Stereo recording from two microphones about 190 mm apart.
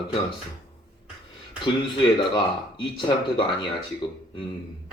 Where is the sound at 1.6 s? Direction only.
25° left (ahead or behind).